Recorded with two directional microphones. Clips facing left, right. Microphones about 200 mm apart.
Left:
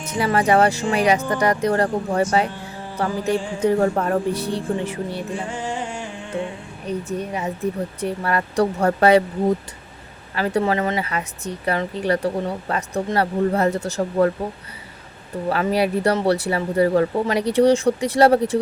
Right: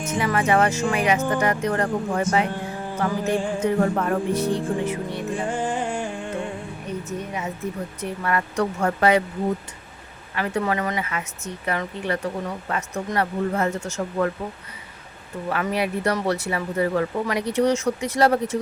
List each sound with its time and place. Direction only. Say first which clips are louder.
0.1 s speech: left 3 dB; 35° left (ahead or behind)
5.5 s music: right 2 dB; 50° right (ahead or behind)
7.1 s speech: left 4 dB; 35° left (ahead or behind)
10.3 s speech: left 4 dB; 30° left (ahead or behind)
15.4 s speech: left 4 dB; 30° left (ahead or behind)